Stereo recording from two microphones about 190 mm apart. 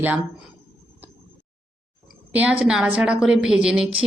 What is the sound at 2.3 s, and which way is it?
Speech, 5° right (ahead or behind).